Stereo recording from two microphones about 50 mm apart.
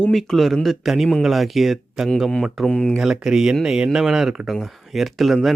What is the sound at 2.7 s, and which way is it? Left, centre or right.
Speech, left.